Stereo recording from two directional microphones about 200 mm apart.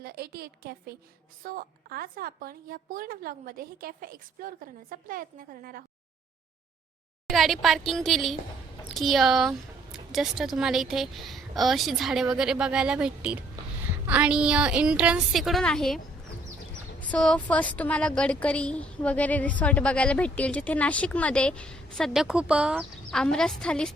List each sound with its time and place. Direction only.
0.0 s a woman's voice: 50° right (ahead or behind)
7.3 s a woman's voice: centre (ahead or behind)
17.0 s a woman's voice: 5° left (ahead or behind)